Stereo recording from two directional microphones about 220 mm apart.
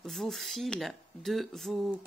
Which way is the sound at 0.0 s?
Centre (ahead or behind).